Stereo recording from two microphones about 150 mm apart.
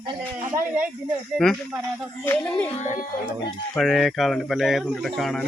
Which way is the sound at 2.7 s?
55° left (ahead or behind).